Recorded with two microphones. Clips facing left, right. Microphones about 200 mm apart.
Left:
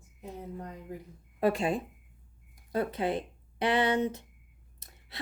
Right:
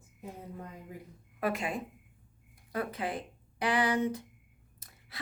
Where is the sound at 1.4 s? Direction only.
25° left (ahead or behind).